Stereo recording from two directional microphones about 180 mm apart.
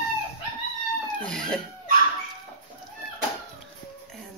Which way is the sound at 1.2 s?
5° left (ahead or behind).